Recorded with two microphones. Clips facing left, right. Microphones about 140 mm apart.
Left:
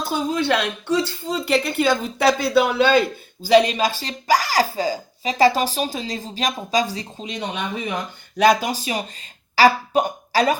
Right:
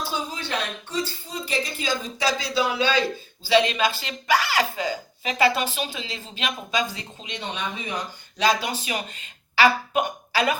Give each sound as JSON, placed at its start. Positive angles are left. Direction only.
{"t": 0.1, "sound": "a woman's voice", "side_deg": 60}
{"t": 7.9, "sound": "speech", "side_deg": 50}
{"t": 8.7, "sound": "speech", "side_deg": 35}